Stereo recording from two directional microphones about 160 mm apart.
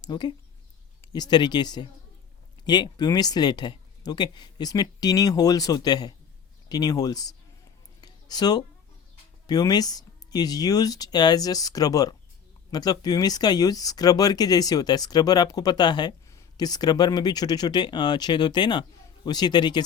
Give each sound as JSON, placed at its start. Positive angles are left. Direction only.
{"t": 0.0, "sound": "speech", "side_deg": 25}
{"t": 8.0, "sound": "a sound", "side_deg": 25}
{"t": 9.5, "sound": "speech", "side_deg": 25}